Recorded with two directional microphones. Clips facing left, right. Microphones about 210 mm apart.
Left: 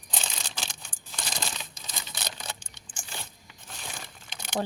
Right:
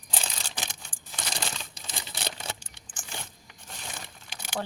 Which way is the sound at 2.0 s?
30° right (ahead or behind).